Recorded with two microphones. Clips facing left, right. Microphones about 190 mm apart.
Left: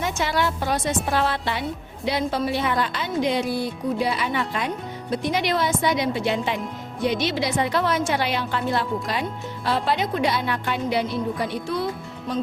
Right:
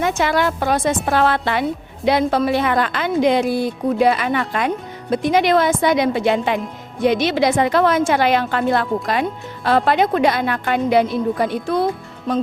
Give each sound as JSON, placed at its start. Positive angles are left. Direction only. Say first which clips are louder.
{"t": 0.0, "sound": "a woman's voice", "louder": "right 6 dB", "side_deg": -60}
{"t": 7.6, "sound": "a woman's voice", "louder": "right 7 dB", "side_deg": -90}
{"t": 8.4, "sound": "a woman's voice", "louder": "right 6 dB", "side_deg": -60}